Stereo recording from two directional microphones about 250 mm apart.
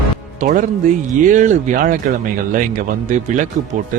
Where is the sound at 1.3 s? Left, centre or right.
Right.